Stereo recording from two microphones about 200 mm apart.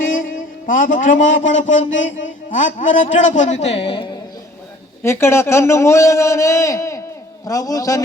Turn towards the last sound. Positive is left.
turn(degrees=15)  # may be behind; listen again after turning